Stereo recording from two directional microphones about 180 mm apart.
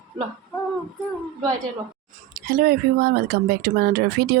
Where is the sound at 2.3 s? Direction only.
55° right (ahead or behind).